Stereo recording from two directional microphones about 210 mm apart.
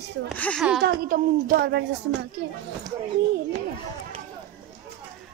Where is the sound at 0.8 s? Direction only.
45° right (ahead or behind).